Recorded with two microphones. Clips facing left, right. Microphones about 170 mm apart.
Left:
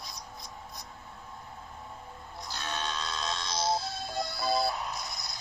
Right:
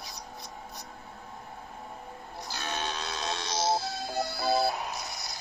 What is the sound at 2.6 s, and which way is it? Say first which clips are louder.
Music: right 1 dB; 70° right (ahead or behind).